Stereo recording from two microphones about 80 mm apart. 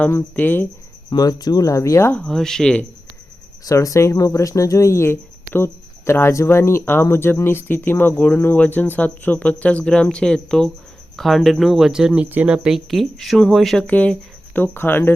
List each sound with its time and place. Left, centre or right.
0.3 s speech: left
1.1 s speech: left
2.1 s speech: centre
3.6 s speech: left; by 12.6 s right
12.6 s speech: centre
13.8 s speech: centre